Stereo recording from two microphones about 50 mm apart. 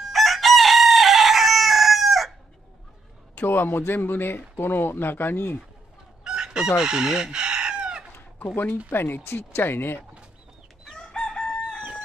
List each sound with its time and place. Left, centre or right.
0.0 s chicken: centre
3.4 s speech: left
6.2 s chicken: centre
8.9 s speech: left
11.0 s chicken: centre